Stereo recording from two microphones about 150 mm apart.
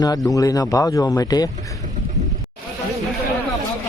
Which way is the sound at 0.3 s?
25° left (ahead or behind).